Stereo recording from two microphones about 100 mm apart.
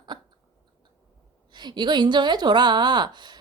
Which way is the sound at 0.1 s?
45° right (ahead or behind).